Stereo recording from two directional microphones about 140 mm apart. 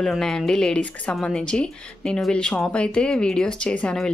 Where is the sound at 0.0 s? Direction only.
5° left (ahead or behind).